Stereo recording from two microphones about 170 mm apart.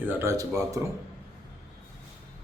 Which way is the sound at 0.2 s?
20° right (ahead or behind).